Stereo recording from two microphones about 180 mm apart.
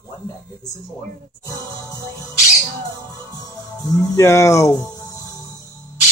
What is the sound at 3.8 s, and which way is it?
Speech, 20° left (ahead or behind).